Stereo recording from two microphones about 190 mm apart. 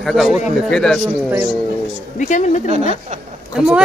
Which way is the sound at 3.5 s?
5° right (ahead or behind).